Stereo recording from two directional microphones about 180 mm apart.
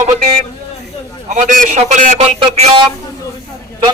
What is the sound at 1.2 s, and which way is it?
A man's voice, 45° right (ahead or behind).